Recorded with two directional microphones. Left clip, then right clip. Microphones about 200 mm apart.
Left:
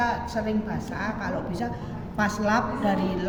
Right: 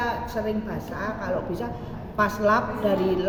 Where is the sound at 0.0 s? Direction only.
15° right (ahead or behind).